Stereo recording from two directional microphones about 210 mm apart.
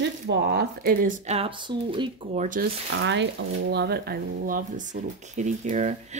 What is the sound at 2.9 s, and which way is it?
Speech, 60° right (ahead or behind).